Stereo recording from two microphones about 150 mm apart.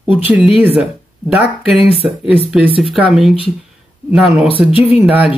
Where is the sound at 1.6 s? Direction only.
40° left (ahead or behind).